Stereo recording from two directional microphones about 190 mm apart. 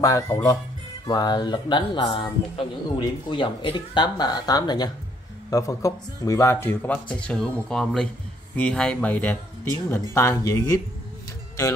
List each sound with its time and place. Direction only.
0.0 s a man's voice: 15° left (ahead or behind)